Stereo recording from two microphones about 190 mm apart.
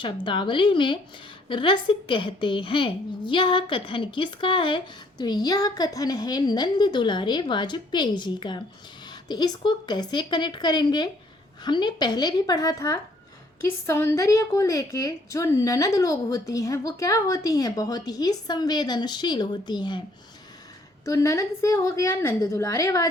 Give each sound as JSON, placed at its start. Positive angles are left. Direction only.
{"t": 0.0, "sound": "a woman's voice", "side_deg": 25}
{"t": 21.0, "sound": "a woman's voice", "side_deg": 15}